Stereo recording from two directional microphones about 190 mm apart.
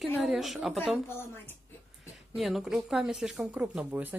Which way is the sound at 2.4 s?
Centre (ahead or behind).